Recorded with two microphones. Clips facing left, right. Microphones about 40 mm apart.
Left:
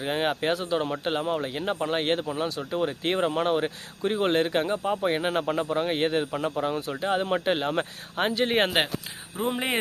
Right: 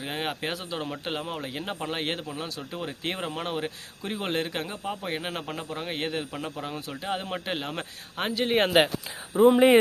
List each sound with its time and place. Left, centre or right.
0.0 s speech: centre
9.4 s speech: centre